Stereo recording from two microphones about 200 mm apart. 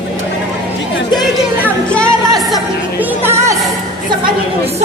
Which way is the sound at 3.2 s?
15° right (ahead or behind).